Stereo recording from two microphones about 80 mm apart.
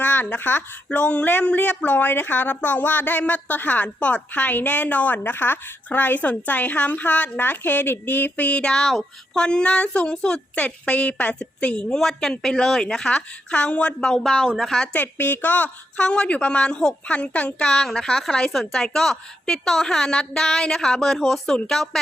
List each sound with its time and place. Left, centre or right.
0.0 s a woman's voice: left; by 14.8 s centre
14.9 s a woman's voice: left; by 21.8 s centre